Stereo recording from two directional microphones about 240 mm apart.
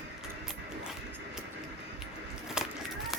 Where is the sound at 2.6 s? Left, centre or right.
Centre.